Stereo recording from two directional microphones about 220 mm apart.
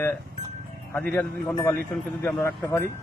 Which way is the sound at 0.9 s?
5° left (ahead or behind).